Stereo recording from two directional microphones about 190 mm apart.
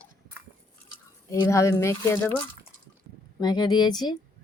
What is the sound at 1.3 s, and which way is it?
Speech, 15° left (ahead or behind).